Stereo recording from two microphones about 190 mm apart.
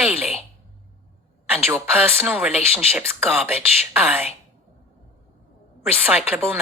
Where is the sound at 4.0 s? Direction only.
5° right (ahead or behind).